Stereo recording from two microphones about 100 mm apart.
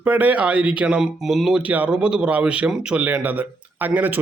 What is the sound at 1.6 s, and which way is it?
A man's voice, 15° right (ahead or behind).